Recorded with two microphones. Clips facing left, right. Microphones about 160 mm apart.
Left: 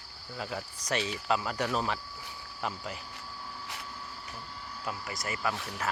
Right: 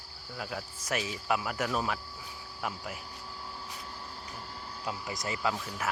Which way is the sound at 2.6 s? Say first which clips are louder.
Left 1 dB; 5° right (ahead or behind).